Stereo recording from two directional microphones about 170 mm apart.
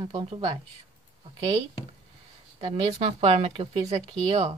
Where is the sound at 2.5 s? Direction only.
35° right (ahead or behind).